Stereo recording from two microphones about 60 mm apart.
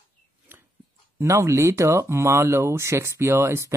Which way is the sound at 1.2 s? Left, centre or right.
Right.